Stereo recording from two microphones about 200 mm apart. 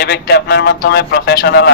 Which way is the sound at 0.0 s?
55° left (ahead or behind).